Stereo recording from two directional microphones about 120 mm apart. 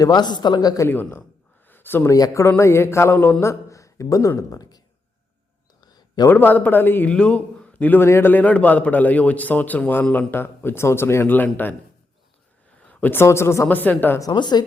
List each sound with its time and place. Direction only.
0.0 s speech: 35° left (ahead or behind)
0.9 s a man's voice: 15° left (ahead or behind)
1.6 s a sound: 15° left (ahead or behind)
2.1 s mantra: 30° left (ahead or behind)
3.4 s speech: 25° left (ahead or behind)
5.8 s a sound: 35° left (ahead or behind)
6.2 s a man's voice: 15° left (ahead or behind)
12.9 s a man's voice: 15° left (ahead or behind)
14.2 s speech: 35° left (ahead or behind)